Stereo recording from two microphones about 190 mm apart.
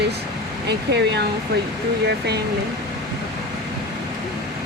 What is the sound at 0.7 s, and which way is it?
Speech, 60° right (ahead or behind).